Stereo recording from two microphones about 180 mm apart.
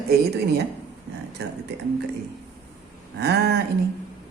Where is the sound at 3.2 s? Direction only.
65° right (ahead or behind).